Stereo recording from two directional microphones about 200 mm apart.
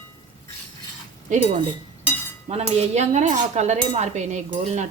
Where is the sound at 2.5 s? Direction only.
30° right (ahead or behind).